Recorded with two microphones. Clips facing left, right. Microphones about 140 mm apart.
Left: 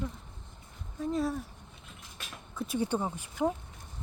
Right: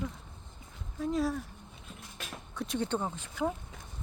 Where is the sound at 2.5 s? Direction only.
5° left (ahead or behind).